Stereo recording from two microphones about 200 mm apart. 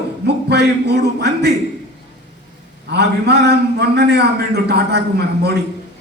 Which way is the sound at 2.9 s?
55° right (ahead or behind).